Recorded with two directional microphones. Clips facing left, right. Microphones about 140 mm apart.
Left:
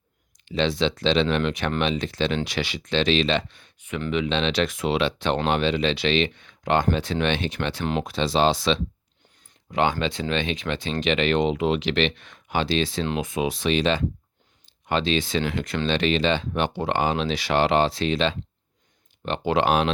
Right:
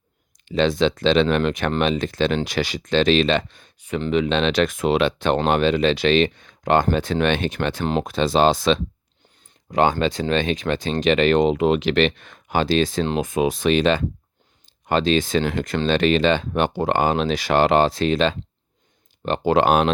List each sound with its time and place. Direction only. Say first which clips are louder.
0.4 s speech: right 4 dB; 45° right (ahead or behind)